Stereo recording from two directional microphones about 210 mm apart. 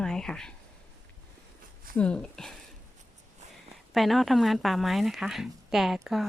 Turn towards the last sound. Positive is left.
turn(degrees=0)  # may be behind; listen again after turning